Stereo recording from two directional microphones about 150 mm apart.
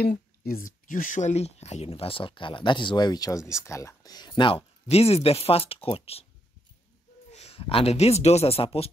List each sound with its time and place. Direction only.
0.0 s speech: 90° left; by 6.2 s 40° left (ahead or behind)
7.3 s speech: 40° left (ahead or behind)